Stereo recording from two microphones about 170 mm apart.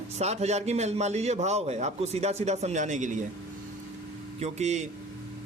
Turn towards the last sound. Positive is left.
turn(degrees=-40)  # may be behind; listen again after turning